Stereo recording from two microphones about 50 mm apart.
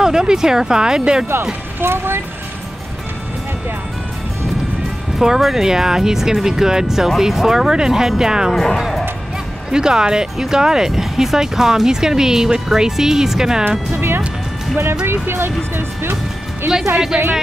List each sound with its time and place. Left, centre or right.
0.0 s speech: centre
1.8 s speech: right
5.2 s speech: centre
8.5 s speech: centre
9.7 s speech: centre
13.7 s music: right
15.0 s speech: right
16.9 s speech: centre